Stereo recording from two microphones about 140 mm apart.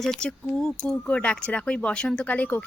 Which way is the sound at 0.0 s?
5° left (ahead or behind).